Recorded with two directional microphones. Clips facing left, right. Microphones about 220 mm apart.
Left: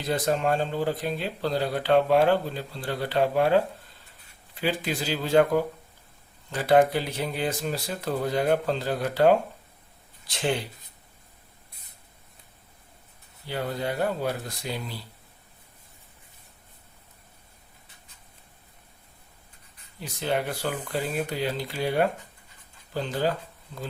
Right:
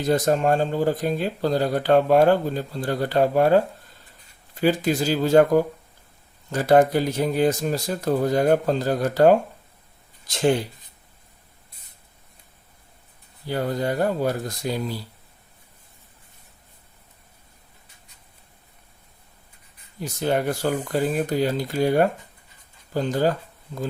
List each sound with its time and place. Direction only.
0.0 s speech: 45° right (ahead or behind)
13.5 s speech: 45° right (ahead or behind)
20.0 s speech: 45° right (ahead or behind)